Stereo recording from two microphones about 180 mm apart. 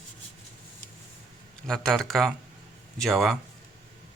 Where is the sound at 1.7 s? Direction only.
Centre (ahead or behind).